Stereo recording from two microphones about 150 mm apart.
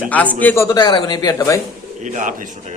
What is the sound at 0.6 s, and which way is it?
Speech, 25° left (ahead or behind).